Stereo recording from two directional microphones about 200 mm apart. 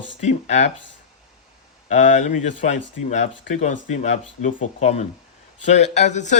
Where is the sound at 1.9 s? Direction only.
35° left (ahead or behind).